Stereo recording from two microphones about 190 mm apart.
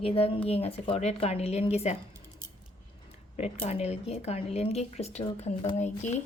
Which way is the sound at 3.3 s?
35° left (ahead or behind).